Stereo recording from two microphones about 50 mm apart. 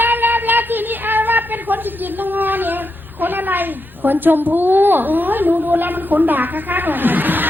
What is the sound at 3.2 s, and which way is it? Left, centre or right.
A woman's voice, right.